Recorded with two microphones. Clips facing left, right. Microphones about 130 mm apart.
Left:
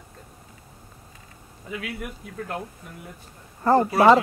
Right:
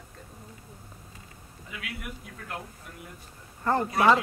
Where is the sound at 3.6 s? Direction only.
35° left (ahead or behind).